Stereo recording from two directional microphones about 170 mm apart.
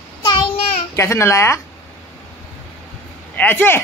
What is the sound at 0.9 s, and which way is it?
Speech, 15° left (ahead or behind).